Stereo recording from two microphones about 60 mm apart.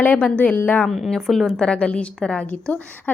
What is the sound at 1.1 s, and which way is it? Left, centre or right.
Speech, centre.